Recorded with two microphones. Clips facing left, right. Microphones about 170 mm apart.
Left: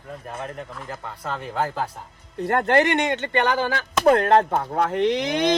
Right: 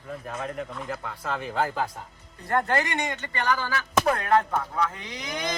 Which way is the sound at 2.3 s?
65° left (ahead or behind).